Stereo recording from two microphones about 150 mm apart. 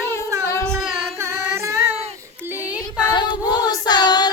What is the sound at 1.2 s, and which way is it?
Child singing, 20° right (ahead or behind).